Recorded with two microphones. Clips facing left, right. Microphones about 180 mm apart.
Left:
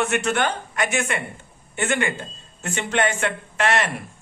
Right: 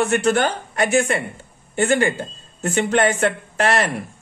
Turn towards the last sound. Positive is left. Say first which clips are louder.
# right 3 dB
turn(degrees=-35)  # may be behind; listen again after turning